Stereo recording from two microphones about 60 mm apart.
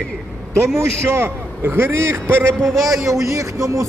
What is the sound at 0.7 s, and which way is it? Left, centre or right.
A man's voice, right.